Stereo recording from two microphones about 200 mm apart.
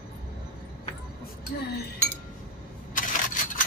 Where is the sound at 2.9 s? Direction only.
40° left (ahead or behind).